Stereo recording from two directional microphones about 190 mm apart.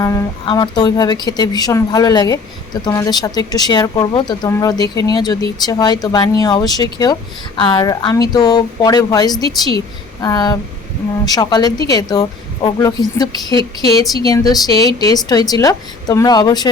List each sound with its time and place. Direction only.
0.0 s speech: 20° left (ahead or behind)